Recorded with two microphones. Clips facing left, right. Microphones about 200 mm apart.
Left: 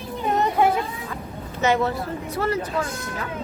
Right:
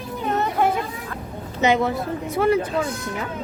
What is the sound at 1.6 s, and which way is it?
Speech, 15° right (ahead or behind).